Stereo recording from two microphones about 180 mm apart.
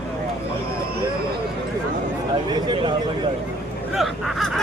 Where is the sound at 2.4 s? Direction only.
25° right (ahead or behind).